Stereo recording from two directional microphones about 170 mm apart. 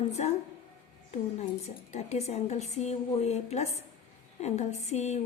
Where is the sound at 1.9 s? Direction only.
40° left (ahead or behind).